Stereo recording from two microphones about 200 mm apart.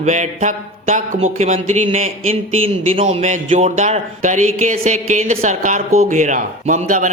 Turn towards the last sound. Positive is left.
turn(degrees=-40)  # may be behind; listen again after turning